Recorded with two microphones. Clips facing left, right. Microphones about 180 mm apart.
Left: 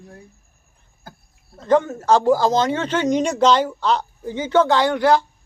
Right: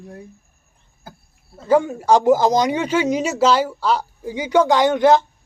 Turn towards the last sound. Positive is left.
turn(degrees=-20)  # may be behind; listen again after turning